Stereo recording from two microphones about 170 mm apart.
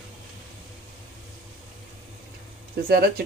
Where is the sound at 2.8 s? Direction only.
65° right (ahead or behind).